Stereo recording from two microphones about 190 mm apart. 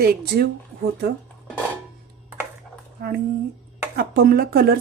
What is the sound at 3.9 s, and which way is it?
Speech, 50° right (ahead or behind).